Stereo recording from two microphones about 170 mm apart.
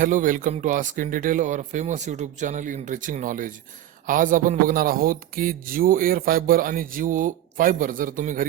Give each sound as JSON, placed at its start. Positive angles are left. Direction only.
{"t": 0.0, "sound": "a man's voice", "side_deg": -50}